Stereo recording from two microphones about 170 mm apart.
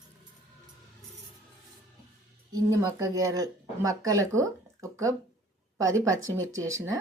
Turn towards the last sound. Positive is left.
turn(degrees=-20)  # may be behind; listen again after turning